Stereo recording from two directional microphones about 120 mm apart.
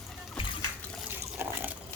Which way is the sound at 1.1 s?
15° right (ahead or behind).